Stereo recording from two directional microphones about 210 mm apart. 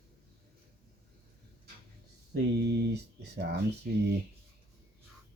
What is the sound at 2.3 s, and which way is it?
Speech, 55° right (ahead or behind).